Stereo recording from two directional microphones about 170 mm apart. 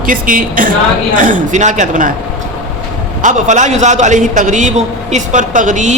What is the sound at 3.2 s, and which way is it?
A man's voice, 45° right (ahead or behind).